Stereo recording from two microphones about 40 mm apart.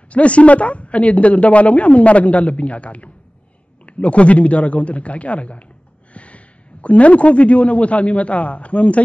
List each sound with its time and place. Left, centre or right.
0.1 s a woman's voice: left